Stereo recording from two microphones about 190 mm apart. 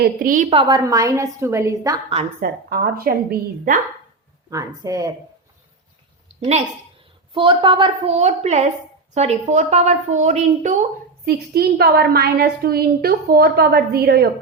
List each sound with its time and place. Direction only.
0.0 s a woman's voice: 50° right (ahead or behind)
0.5 s a woman's voice: 25° right (ahead or behind)
2.4 s a woman's voice: 50° right (ahead or behind)
4.4 s a woman's voice: 15° right (ahead or behind)
6.4 s a woman's voice: 35° right (ahead or behind)
11.3 s a woman's voice: 55° right (ahead or behind)